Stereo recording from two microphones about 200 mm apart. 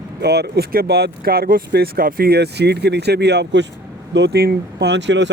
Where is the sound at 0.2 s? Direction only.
55° right (ahead or behind).